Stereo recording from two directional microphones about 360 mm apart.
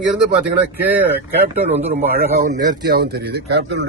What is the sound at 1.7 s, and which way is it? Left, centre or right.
Speech, right.